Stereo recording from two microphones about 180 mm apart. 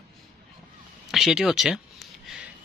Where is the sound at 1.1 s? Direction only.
Centre (ahead or behind).